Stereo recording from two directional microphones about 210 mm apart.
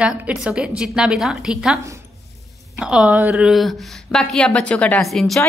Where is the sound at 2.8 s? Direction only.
5° right (ahead or behind).